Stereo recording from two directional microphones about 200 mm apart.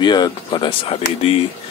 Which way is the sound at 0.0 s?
20° left (ahead or behind).